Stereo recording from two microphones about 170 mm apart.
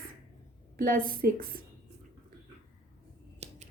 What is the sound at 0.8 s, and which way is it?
Speech, 55° right (ahead or behind).